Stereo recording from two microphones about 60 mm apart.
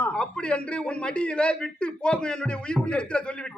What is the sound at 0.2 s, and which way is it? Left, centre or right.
A man's voice, centre.